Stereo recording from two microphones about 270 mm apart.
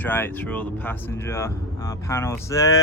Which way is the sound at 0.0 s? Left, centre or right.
Centre.